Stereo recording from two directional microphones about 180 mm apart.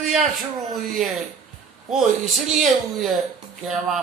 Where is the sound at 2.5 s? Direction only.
Centre (ahead or behind).